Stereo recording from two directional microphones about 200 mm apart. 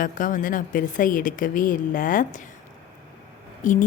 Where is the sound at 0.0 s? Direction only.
40° left (ahead or behind).